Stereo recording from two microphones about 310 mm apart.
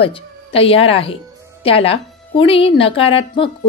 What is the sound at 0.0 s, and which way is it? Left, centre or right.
A woman's voice, centre.